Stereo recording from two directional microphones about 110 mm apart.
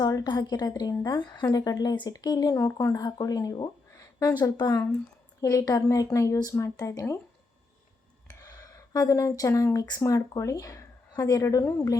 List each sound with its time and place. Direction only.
0.0 s speech: 35° left (ahead or behind)
8.4 s speech: 35° left (ahead or behind)